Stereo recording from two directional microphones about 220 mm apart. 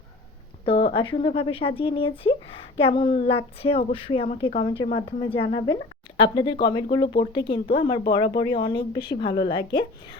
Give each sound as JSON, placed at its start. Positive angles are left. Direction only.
{"t": 0.6, "sound": "speech", "side_deg": 25}